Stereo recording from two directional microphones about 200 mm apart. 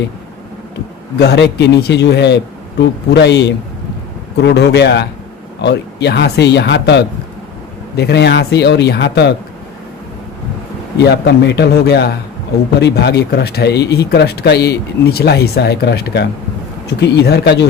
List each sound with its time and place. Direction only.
1.2 s speech: 55° left (ahead or behind)
11.0 s speech: 55° left (ahead or behind)